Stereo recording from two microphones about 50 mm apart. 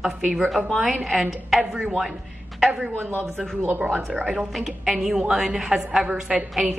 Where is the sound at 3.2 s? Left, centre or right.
Centre.